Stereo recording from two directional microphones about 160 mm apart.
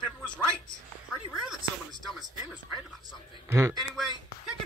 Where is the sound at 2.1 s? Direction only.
Centre (ahead or behind).